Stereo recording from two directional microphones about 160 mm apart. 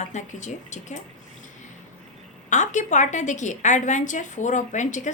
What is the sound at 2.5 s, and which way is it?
A woman's voice, 50° left (ahead or behind).